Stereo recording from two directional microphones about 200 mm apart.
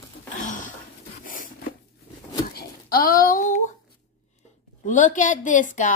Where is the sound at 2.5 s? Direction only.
45° left (ahead or behind).